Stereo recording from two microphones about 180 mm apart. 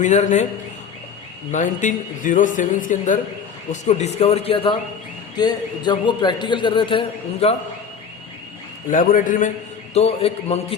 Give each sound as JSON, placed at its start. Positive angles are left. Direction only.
{"t": 0.0, "sound": "speech", "side_deg": 40}
{"t": 1.5, "sound": "a man's voice", "side_deg": 45}
{"t": 8.9, "sound": "speech", "side_deg": 50}
{"t": 9.9, "sound": "speech", "side_deg": 35}